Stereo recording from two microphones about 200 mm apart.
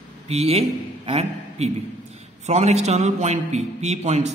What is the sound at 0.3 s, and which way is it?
A man's voice, 30° right (ahead or behind).